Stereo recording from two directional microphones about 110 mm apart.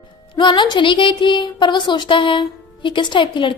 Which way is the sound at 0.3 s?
45° left (ahead or behind).